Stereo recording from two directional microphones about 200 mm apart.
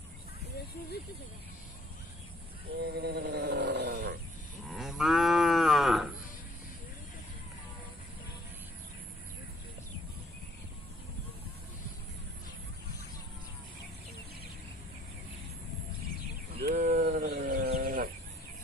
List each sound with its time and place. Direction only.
2.8 s a sound: 55° right (ahead or behind)
4.6 s moo: centre (ahead or behind)
16.6 s bird: 45° right (ahead or behind)
17.7 s chicken: 45° right (ahead or behind)